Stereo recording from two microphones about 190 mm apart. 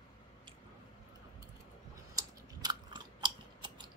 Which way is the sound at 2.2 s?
20° right (ahead or behind).